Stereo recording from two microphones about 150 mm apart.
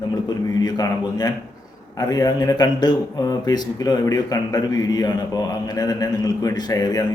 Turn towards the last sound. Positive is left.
turn(degrees=25)  # may be behind; listen again after turning